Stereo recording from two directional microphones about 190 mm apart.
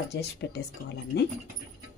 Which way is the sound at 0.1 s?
65° left (ahead or behind).